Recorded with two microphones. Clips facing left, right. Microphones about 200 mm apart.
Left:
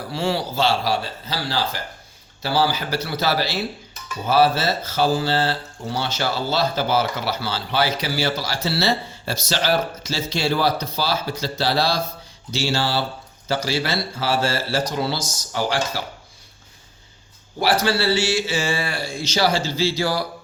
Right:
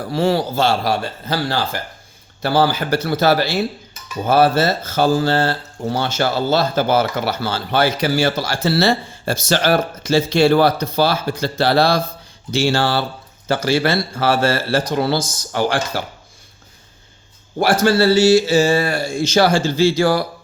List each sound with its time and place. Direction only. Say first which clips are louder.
0.1 s speech: right 6 dB; 45° right (ahead or behind)
17.6 s speech: right 6 dB; 50° right (ahead or behind)